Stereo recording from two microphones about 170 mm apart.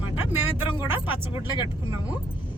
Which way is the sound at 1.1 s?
30° left (ahead or behind).